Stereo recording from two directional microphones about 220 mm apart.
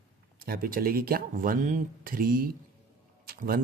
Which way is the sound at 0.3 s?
40° right (ahead or behind).